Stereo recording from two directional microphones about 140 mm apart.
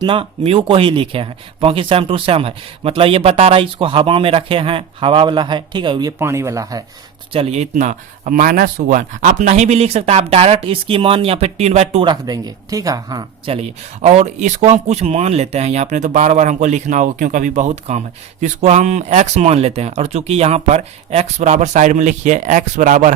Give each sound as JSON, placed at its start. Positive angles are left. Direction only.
{"t": 0.0, "sound": "speech", "side_deg": -40}
{"t": 6.1, "sound": "speech", "side_deg": -20}
{"t": 7.3, "sound": "speech", "side_deg": -50}
{"t": 12.0, "sound": "speech", "side_deg": -25}
{"t": 13.4, "sound": "speech", "side_deg": -45}